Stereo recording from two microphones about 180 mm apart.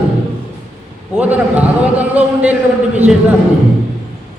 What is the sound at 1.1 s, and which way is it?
A man's voice, 10° right (ahead or behind).